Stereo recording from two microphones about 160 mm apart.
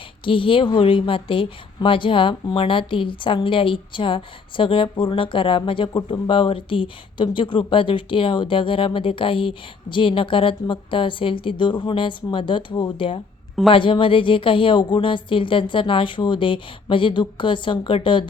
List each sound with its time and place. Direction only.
0.3 s a woman's voice: 35° left (ahead or behind)